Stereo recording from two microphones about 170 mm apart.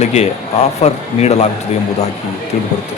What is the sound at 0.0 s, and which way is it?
Speech, 40° left (ahead or behind).